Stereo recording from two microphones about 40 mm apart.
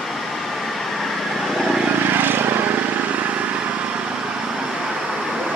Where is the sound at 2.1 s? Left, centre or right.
Right.